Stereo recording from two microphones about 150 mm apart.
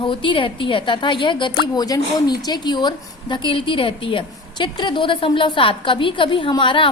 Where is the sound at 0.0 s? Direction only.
35° left (ahead or behind).